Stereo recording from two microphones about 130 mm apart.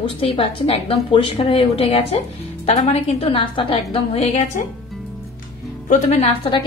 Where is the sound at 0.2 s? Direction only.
45° left (ahead or behind).